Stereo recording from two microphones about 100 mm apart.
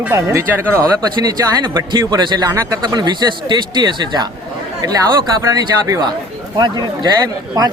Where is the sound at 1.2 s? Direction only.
45° right (ahead or behind).